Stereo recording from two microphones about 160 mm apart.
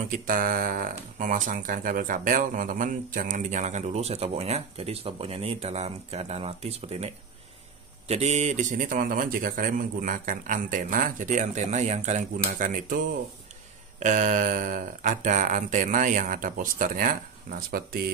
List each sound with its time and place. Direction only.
0.3 s speech: 60° right (ahead or behind); by 7.1 s 40° right (ahead or behind)
8.1 s speech: 45° right (ahead or behind); by 18.0 s 65° right (ahead or behind)